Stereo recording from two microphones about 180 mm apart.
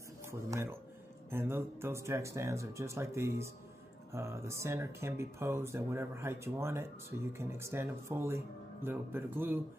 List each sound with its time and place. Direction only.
0.3 s speech: 15° right (ahead or behind)